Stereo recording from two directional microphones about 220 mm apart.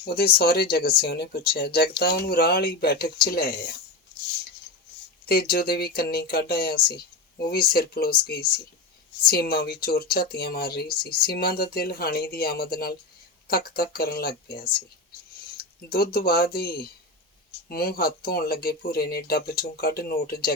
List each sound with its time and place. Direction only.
0.0 s speech: 45° left (ahead or behind)
5.2 s speech: 45° left (ahead or behind)